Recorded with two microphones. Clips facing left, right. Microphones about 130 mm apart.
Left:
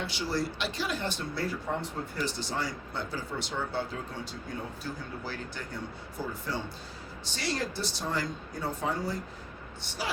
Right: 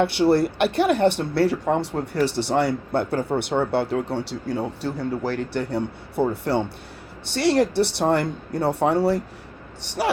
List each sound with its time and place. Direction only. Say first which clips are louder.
0.0 s speech: right 14 dB; 65° right (ahead or behind)